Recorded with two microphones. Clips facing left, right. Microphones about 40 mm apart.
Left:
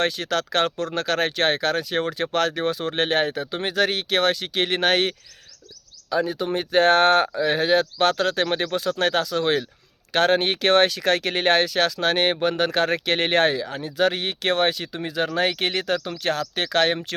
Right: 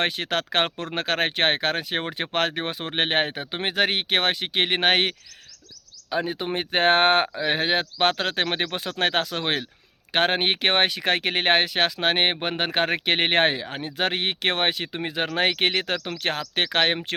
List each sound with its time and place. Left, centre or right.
0.0 s speech: right